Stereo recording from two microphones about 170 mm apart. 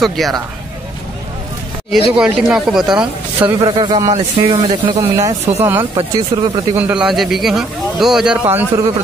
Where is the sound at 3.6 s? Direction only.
30° right (ahead or behind).